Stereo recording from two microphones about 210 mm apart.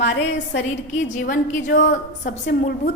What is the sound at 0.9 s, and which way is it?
A woman's voice, 35° left (ahead or behind).